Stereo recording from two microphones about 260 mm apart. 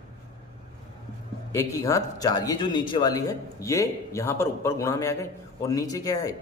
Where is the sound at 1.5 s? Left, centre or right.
Centre.